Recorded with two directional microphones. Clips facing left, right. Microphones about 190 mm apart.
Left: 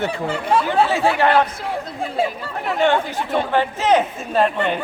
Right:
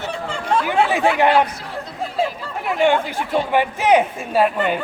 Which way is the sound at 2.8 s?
10° right (ahead or behind).